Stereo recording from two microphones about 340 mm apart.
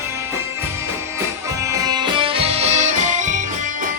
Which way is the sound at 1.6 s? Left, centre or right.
Centre.